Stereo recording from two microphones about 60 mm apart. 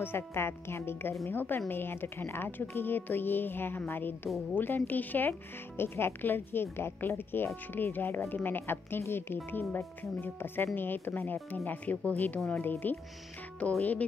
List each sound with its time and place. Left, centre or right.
0.0 s speech: left
13.6 s speech: left